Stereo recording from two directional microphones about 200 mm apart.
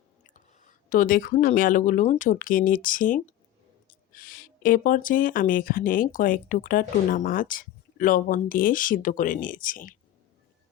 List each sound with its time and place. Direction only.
0.3 s speech: 40° left (ahead or behind)